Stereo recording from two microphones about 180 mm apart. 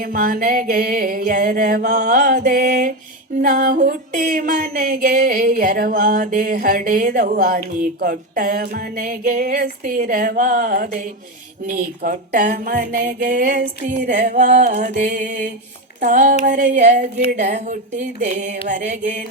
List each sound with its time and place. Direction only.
0.0 s music: 50° right (ahead or behind)